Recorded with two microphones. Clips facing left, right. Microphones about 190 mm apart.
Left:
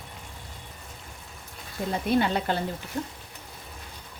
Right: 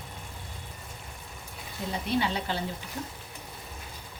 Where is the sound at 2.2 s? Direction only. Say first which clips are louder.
Left 4 dB; 55° left (ahead or behind).